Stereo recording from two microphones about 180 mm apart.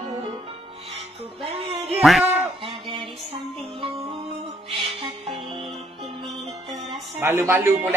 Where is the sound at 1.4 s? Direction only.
30° right (ahead or behind).